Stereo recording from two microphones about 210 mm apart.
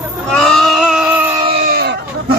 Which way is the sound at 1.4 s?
25° right (ahead or behind).